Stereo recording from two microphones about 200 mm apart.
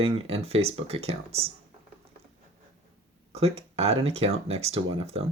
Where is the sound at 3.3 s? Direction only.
30° right (ahead or behind).